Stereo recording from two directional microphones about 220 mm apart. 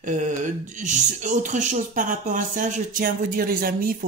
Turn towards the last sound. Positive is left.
turn(degrees=-40)  # may be behind; listen again after turning